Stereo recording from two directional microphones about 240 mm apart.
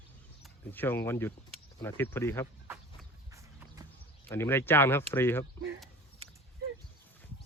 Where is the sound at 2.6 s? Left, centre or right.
Centre.